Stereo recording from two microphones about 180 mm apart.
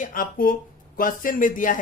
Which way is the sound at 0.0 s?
50° left (ahead or behind).